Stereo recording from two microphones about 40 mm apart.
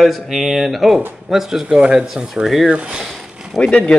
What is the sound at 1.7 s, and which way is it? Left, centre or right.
Speech, right.